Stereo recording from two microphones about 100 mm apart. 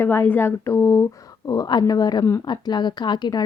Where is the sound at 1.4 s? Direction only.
40° left (ahead or behind).